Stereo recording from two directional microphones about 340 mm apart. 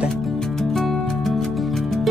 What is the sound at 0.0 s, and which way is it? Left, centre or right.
Music, centre.